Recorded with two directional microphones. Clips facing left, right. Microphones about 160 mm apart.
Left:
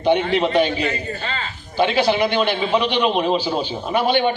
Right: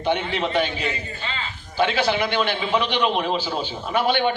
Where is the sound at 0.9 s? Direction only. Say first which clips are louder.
Left 4 dB; 45° left (ahead or behind).